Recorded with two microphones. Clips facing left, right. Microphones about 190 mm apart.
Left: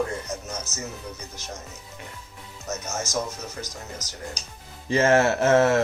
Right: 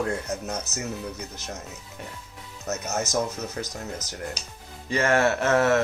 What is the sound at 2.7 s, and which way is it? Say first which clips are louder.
Speech: right 2 dB; 60° right (ahead or behind).